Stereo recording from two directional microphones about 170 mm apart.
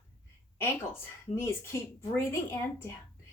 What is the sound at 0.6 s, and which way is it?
Speech, 15° left (ahead or behind).